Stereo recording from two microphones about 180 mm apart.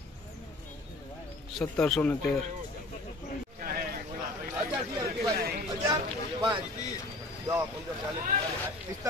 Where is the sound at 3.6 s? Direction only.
55° right (ahead or behind).